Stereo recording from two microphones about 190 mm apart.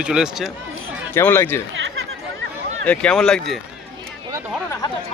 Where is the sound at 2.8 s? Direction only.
5° left (ahead or behind).